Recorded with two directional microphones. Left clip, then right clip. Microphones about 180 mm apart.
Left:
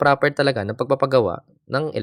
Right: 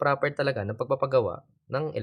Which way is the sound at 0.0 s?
35° left (ahead or behind).